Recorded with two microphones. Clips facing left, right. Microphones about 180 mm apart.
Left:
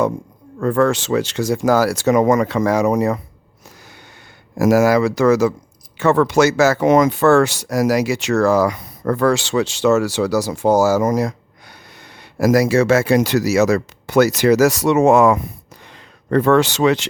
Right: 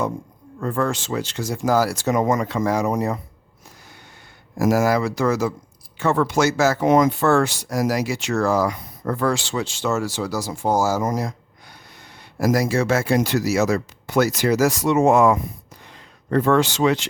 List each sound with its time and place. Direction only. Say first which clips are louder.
0.6 s speech: left 7 dB; 80° left
4.5 s speech: left 5 dB; 75° left (ahead or behind)